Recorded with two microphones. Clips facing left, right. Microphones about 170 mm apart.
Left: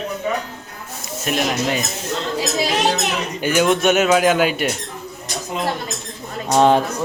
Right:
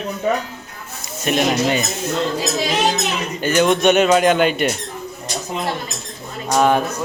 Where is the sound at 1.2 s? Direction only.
Centre (ahead or behind).